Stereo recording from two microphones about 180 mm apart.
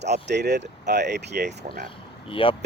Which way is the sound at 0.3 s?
70° right (ahead or behind).